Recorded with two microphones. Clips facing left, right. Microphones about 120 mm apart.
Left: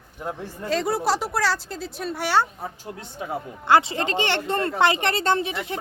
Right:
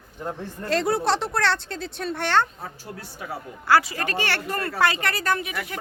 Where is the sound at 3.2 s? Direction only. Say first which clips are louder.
Left 5 dB; 25° left (ahead or behind).